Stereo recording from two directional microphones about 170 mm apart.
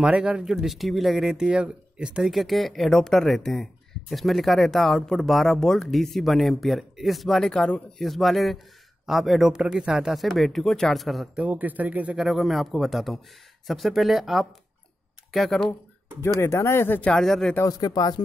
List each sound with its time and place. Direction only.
0.0 s speech: 5° right (ahead or behind)
16.2 s speech: 15° left (ahead or behind)
17.6 s speech: 20° left (ahead or behind)